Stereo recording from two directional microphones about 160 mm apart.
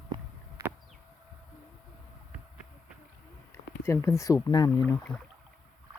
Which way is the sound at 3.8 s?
15° left (ahead or behind).